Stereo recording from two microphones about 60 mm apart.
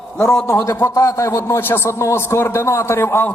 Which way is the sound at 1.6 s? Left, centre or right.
Left.